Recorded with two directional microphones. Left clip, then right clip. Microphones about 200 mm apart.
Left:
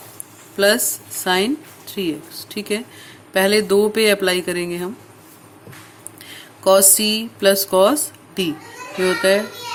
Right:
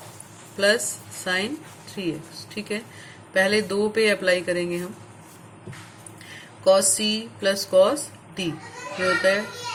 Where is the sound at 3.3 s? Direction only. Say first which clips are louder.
Left 5 dB; 55° left (ahead or behind).